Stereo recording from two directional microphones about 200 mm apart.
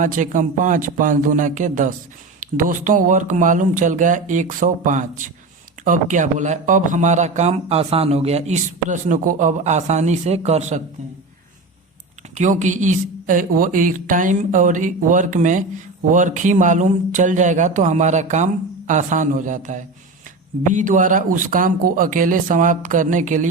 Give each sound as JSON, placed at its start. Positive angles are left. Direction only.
{"t": 0.0, "sound": "a man's voice", "side_deg": -40}
{"t": 12.3, "sound": "a man's voice", "side_deg": -35}